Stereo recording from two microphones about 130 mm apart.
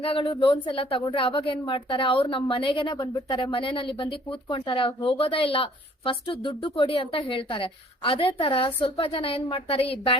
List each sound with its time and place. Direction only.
0.0 s a woman's voice: 45° left (ahead or behind)